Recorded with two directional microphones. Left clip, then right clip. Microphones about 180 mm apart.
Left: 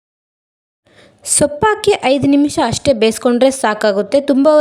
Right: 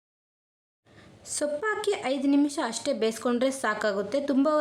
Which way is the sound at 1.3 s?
50° left (ahead or behind).